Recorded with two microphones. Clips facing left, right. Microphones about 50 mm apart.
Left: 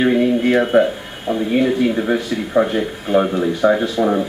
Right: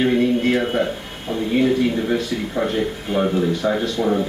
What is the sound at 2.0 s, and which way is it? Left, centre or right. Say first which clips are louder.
Speech: left 2 dB; centre.